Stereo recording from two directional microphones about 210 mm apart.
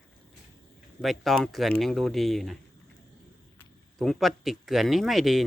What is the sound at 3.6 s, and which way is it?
Speech, centre (ahead or behind).